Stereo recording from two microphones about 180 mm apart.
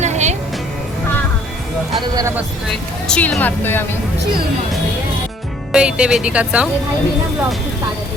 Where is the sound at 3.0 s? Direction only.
5° left (ahead or behind).